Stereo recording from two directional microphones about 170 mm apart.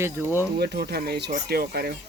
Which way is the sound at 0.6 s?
70° right (ahead or behind).